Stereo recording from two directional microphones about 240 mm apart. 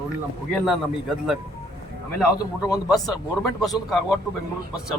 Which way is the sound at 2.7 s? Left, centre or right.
Centre.